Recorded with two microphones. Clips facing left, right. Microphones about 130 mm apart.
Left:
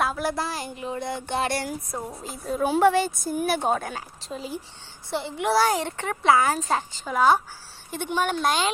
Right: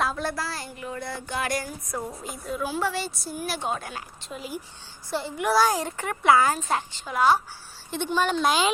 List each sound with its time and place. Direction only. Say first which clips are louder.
0.0 s a sound: left 2 dB; 5° left (ahead or behind)
0.3 s speech: left 3 dB; 20° left (ahead or behind)
2.0 s a woman's voice: right 1 dB; 5° left (ahead or behind)
2.2 s a child's voice: left 3 dB; 30° left (ahead or behind)
2.6 s speech: left 9 dB; 60° left (ahead or behind)
4.2 s speech: left 2 dB; 30° left (ahead or behind)
6.6 s speech: left 2 dB; 45° left (ahead or behind)
7.9 s a woman's voice: right 1 dB; 10° left (ahead or behind)
8.4 s speech: right 1 dB; 5° right (ahead or behind)